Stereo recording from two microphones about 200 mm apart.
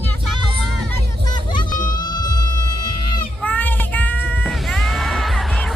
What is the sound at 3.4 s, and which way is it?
Music, 10° left (ahead or behind).